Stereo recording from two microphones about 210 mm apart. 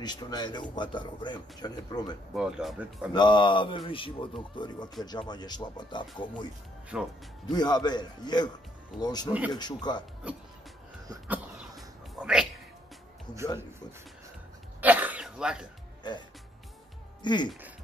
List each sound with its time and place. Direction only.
0.0 s speech: 20° left (ahead or behind)
2.3 s speech: 5° right (ahead or behind)
3.1 s speech: 20° left (ahead or behind)
6.9 s speech: 5° right (ahead or behind)
7.5 s speech: 20° left (ahead or behind)
11.1 s a sound: 5° right (ahead or behind)
14.8 s throat clearing: 10° right (ahead or behind)
17.2 s speech: 20° left (ahead or behind)